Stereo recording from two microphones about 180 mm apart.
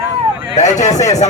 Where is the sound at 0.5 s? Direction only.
40° left (ahead or behind).